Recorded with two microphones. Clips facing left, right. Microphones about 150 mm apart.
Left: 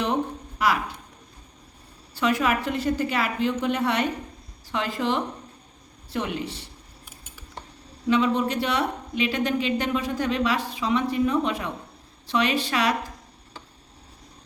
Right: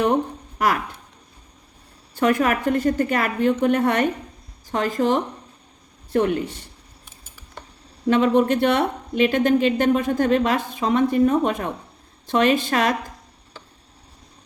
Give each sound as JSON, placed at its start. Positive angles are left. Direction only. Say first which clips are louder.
{"t": 0.6, "sound": "a woman's voice", "louder": "right 2 dB", "side_deg": -50}
{"t": 2.1, "sound": "a woman's voice", "louder": "right 4 dB", "side_deg": -50}
{"t": 8.0, "sound": "a woman's voice", "louder": "right 5 dB", "side_deg": -50}